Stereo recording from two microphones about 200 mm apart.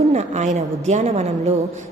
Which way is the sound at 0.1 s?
35° right (ahead or behind).